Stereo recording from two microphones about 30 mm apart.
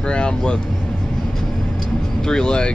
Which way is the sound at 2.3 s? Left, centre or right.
Left.